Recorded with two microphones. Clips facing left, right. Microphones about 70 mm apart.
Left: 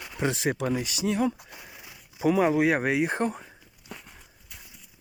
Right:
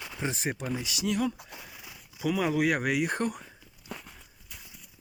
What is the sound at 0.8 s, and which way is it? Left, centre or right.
Speech, left.